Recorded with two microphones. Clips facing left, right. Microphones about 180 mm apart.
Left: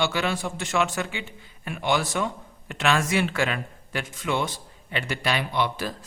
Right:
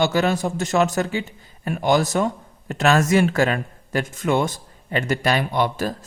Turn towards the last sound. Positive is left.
turn(degrees=-45)  # may be behind; listen again after turning